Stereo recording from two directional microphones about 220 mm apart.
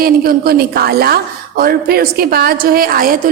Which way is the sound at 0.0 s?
45° right (ahead or behind).